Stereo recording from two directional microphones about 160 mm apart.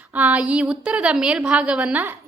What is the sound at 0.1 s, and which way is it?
A child's voice, 10° right (ahead or behind).